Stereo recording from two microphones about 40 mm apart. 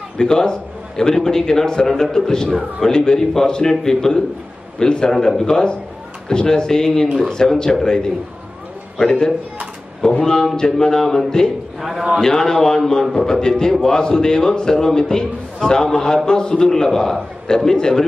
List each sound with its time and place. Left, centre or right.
0.2 s a man's voice: centre